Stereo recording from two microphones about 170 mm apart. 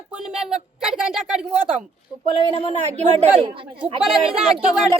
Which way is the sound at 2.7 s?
40° right (ahead or behind).